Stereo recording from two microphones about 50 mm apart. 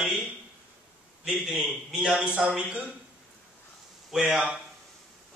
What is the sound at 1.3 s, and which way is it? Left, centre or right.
Speech, centre.